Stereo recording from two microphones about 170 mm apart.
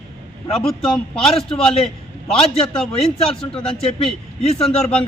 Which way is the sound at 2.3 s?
35° left (ahead or behind).